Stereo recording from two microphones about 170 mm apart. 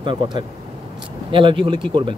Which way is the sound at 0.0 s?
30° right (ahead or behind).